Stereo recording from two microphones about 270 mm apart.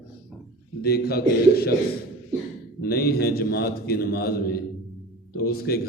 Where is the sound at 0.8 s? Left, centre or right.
Left.